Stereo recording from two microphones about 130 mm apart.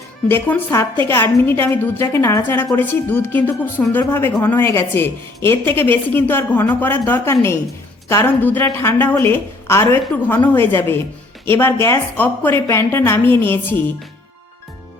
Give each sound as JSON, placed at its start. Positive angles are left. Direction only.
{"t": 0.3, "sound": "a woman's voice", "side_deg": 15}